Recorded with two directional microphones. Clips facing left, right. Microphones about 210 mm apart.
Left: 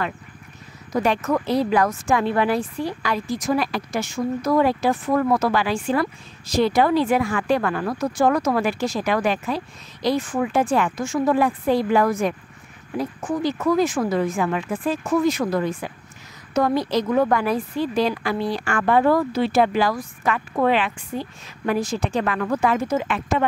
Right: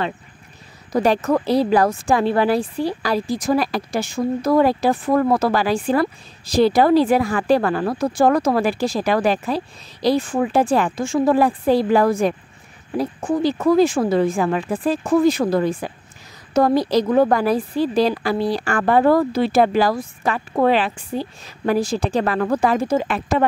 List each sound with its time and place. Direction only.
0.9 s speech: 35° right (ahead or behind)